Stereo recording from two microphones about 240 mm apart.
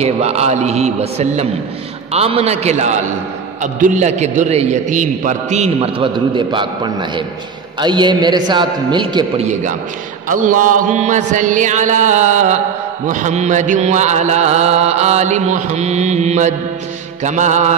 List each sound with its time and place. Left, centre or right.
0.0 s a man's voice: right
10.2 s mantra: right
13.0 s a man's voice: right